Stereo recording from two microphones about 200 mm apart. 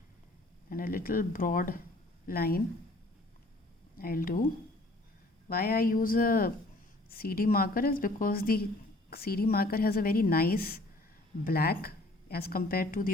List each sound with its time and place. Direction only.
0.7 s a woman's voice: 45° left (ahead or behind)
3.9 s a woman's voice: 45° left (ahead or behind)
5.5 s a woman's voice: 50° left (ahead or behind)